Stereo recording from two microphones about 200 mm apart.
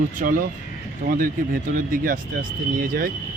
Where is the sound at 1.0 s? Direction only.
45° right (ahead or behind).